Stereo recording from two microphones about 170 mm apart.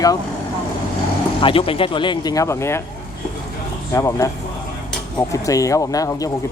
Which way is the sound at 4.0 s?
20° left (ahead or behind).